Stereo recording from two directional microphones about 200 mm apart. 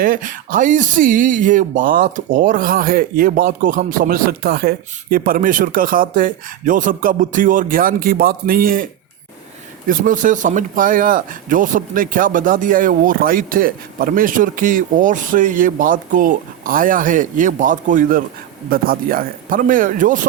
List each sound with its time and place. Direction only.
0.0 s a man's voice: 40° right (ahead or behind)